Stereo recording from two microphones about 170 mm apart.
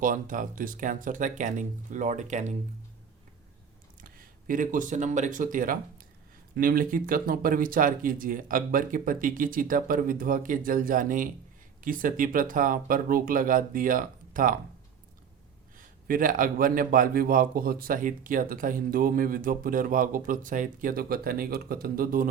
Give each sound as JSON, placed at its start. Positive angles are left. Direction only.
{"t": 0.0, "sound": "speech", "side_deg": -50}
{"t": 4.0, "sound": "a man's voice", "side_deg": -55}
{"t": 16.0, "sound": "a man's voice", "side_deg": -55}